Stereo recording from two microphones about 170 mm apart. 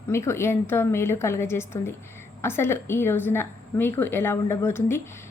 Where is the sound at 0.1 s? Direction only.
15° left (ahead or behind).